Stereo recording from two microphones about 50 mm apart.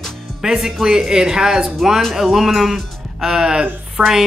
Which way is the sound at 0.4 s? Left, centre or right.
Centre.